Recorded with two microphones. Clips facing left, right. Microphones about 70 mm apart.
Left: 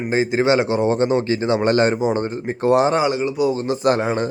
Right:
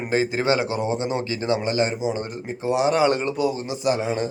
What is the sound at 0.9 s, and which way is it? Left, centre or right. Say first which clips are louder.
Speech: left 7 dB; left.